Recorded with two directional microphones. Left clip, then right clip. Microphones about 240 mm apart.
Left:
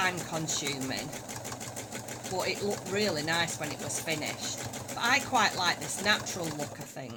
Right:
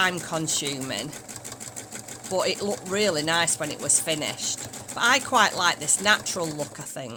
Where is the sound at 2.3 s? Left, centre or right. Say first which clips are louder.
Right 7 dB; right.